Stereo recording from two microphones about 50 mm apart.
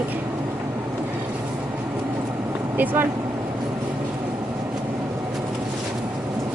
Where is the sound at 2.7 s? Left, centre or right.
Right.